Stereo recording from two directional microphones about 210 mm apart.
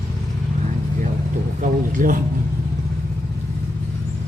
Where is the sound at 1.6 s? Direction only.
40° right (ahead or behind).